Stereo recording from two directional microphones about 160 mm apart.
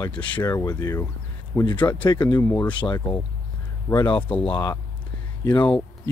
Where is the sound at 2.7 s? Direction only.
30° left (ahead or behind).